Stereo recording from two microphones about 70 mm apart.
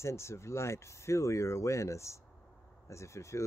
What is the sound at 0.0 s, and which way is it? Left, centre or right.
Speech, left.